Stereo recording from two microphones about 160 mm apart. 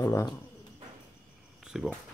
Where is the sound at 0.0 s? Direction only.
20° left (ahead or behind).